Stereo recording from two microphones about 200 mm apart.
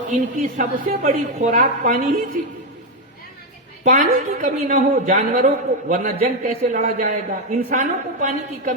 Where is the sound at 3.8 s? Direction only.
40° right (ahead or behind).